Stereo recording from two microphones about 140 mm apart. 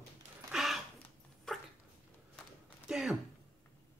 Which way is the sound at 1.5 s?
5° left (ahead or behind).